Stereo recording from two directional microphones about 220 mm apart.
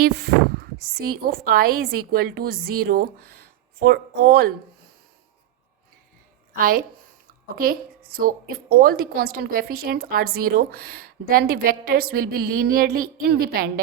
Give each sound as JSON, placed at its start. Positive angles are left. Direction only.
{"t": 0.0, "sound": "a woman's voice", "side_deg": -45}
{"t": 7.3, "sound": "a woman's voice", "side_deg": -40}